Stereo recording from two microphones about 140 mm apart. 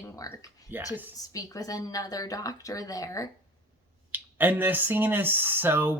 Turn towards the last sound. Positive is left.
turn(degrees=-15)  # may be behind; listen again after turning